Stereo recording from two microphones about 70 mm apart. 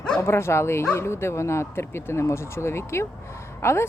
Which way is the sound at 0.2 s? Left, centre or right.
Left.